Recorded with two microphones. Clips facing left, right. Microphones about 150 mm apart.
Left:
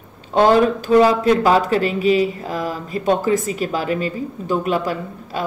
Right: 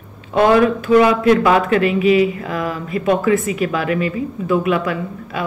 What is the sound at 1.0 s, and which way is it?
Speech, 35° left (ahead or behind).